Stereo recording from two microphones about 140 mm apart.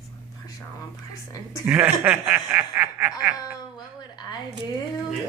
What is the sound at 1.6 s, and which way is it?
Snicker, 10° right (ahead or behind).